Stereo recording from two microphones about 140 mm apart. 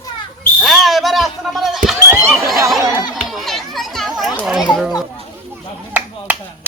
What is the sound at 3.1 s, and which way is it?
Chatter, centre (ahead or behind).